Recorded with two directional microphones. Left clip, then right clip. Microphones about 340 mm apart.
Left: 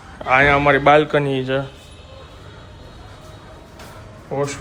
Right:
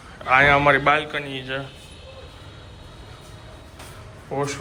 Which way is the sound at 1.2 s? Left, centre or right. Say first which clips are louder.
Left 10 dB; left.